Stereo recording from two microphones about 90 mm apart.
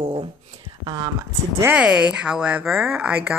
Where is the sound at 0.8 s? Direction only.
50° right (ahead or behind).